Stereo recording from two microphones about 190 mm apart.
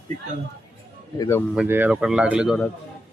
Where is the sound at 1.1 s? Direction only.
20° left (ahead or behind).